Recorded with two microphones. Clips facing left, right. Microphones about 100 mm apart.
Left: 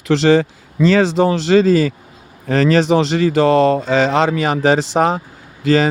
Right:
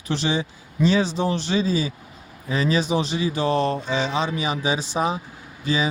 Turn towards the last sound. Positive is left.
turn(degrees=90)